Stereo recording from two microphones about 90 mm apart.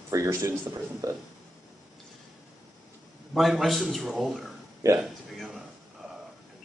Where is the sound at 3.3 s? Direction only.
Centre (ahead or behind).